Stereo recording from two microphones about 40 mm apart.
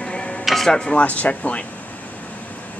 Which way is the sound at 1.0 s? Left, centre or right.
Left.